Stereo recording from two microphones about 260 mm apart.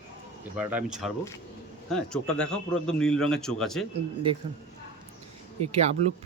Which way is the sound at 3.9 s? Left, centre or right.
Right.